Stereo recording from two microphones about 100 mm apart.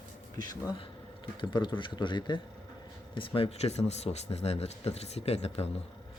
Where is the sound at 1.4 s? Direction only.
50° left (ahead or behind); by 5.7 s 90° left.